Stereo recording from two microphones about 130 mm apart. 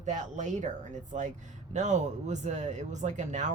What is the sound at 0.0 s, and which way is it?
Speech, 70° right (ahead or behind).